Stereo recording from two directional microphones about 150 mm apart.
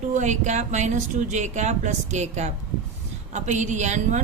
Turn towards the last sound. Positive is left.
turn(degrees=-50)  # may be behind; listen again after turning